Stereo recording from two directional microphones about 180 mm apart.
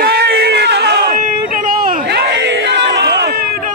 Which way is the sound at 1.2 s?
50° right (ahead or behind).